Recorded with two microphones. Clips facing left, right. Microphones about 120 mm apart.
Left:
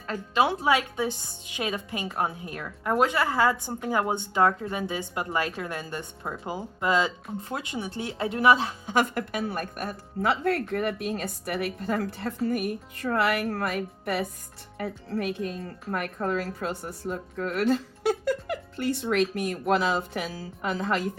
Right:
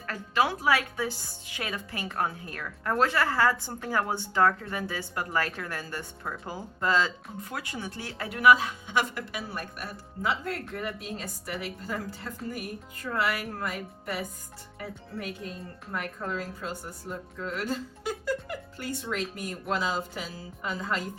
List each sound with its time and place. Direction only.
0.1 s a woman's voice: 20° left (ahead or behind)
9.0 s a woman's voice: 50° left (ahead or behind)
10.2 s speech: 65° left (ahead or behind)